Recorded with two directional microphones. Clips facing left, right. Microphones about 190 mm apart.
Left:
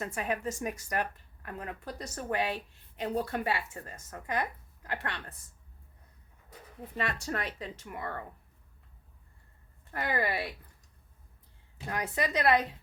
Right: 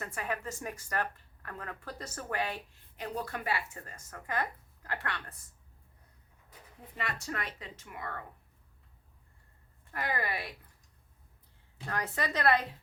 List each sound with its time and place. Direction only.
0.0 s speech: 20° left (ahead or behind)
6.9 s speech: 30° left (ahead or behind)
9.9 s speech: 30° left (ahead or behind)
11.9 s speech: 15° left (ahead or behind)